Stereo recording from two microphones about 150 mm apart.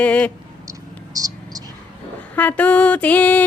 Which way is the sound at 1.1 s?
25° right (ahead or behind).